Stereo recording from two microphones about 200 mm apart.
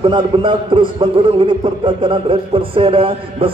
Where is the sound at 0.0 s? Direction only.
25° right (ahead or behind).